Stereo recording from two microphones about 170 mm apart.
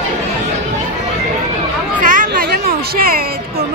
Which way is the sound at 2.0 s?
50° right (ahead or behind).